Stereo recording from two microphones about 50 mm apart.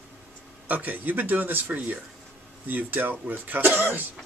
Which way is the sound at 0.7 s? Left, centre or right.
Right.